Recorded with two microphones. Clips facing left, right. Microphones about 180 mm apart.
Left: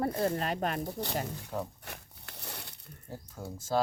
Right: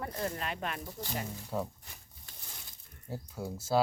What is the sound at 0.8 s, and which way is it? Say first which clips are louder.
Speech: left 5 dB; 65° left (ahead or behind).